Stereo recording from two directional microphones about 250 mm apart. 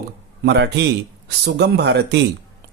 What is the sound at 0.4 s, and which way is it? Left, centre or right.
Speech, right.